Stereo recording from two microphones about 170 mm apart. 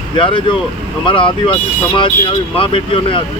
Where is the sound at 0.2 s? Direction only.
30° left (ahead or behind).